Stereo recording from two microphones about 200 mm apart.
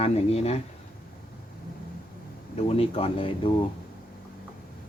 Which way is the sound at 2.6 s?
30° left (ahead or behind).